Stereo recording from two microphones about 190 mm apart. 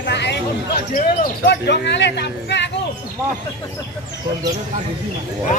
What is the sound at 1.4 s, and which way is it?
Speech, 60° left (ahead or behind).